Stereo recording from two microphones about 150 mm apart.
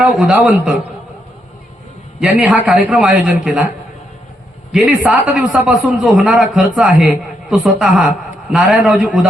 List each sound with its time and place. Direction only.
0.0 s a man's voice: 10° right (ahead or behind)
2.2 s a man's voice: 10° right (ahead or behind)
4.7 s a man's voice: 5° right (ahead or behind)